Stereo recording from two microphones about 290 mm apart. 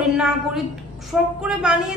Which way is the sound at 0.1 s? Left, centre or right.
Centre.